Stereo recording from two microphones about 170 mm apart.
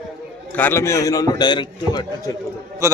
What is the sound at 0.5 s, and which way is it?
A man's voice, 10° left (ahead or behind).